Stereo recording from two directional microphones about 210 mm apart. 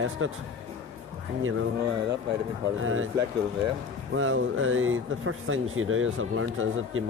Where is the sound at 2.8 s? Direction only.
75° right (ahead or behind).